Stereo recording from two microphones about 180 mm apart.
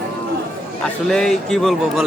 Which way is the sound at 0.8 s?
5° left (ahead or behind).